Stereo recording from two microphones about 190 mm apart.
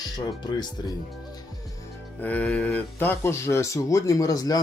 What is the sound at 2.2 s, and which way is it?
Speech, 5° left (ahead or behind).